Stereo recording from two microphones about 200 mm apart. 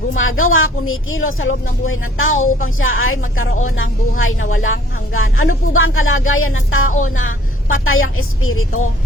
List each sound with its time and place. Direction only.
0.1 s a woman's voice: 85° left